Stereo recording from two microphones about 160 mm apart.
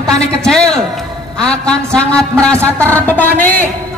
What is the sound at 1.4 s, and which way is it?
Music, 5° left (ahead or behind).